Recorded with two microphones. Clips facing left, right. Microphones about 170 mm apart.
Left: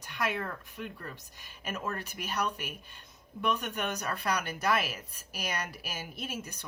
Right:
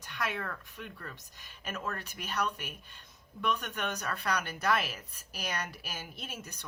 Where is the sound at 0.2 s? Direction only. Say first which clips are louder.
Left 3 dB; 10° left (ahead or behind).